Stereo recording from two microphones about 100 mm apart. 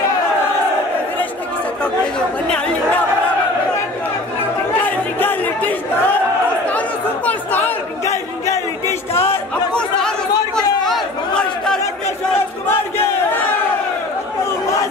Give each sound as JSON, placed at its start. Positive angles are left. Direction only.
{"t": 1.8, "sound": "speech", "side_deg": 10}
{"t": 4.8, "sound": "chatter", "side_deg": 20}
{"t": 7.2, "sound": "chatter", "side_deg": 20}
{"t": 8.0, "sound": "a sound", "side_deg": 30}
{"t": 9.8, "sound": "chatter", "side_deg": 5}